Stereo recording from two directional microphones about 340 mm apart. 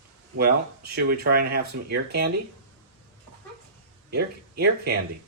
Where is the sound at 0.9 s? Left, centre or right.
Right.